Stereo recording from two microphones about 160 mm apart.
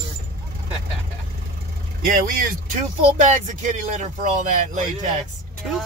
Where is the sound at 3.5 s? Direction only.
50° right (ahead or behind).